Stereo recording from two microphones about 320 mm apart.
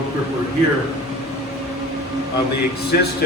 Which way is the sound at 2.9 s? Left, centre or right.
Left.